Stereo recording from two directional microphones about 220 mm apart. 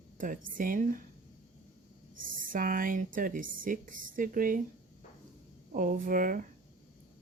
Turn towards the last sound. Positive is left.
turn(degrees=-40)  # may be behind; listen again after turning